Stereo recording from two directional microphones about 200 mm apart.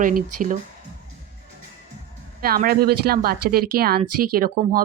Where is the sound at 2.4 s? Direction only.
50° right (ahead or behind).